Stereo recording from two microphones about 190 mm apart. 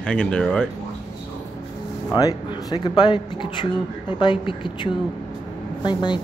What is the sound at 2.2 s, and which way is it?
Speech, 20° left (ahead or behind).